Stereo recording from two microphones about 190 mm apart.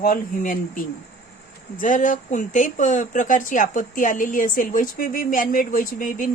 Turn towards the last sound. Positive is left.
turn(degrees=45)  # may be behind; listen again after turning